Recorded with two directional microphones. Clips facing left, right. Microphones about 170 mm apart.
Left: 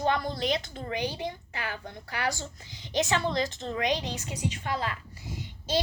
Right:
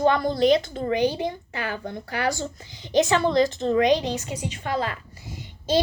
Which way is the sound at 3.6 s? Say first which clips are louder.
Right 10 dB; 40° right (ahead or behind).